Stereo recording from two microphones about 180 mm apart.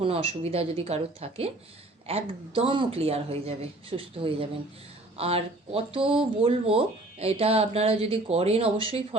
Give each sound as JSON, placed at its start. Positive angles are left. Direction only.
{"t": 0.0, "sound": "speech", "side_deg": -30}